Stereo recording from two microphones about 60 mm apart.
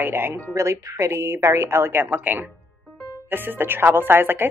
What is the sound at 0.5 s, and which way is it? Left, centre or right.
A woman's voice, right.